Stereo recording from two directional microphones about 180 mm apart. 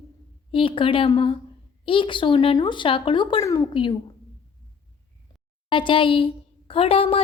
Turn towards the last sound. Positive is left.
turn(degrees=30)  # may be behind; listen again after turning